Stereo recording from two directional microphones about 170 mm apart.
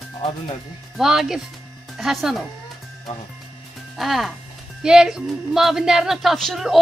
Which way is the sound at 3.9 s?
Centre (ahead or behind).